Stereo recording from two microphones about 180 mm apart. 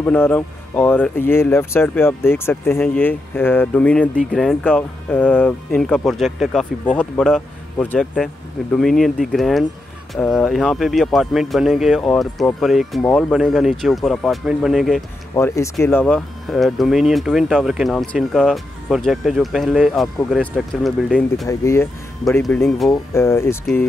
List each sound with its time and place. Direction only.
0.0 s speech: 5° left (ahead or behind)
15.3 s speech: 15° left (ahead or behind); by 21.5 s centre (ahead or behind)
21.5 s speech: 15° left (ahead or behind)
22.4 s speech: 5° left (ahead or behind)